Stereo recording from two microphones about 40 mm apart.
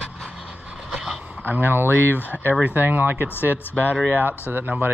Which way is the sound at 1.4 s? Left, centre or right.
Right.